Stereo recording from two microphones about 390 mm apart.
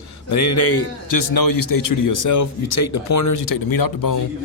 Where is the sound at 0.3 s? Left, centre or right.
Left.